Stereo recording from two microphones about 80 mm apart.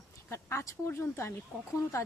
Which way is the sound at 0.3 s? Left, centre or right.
Left.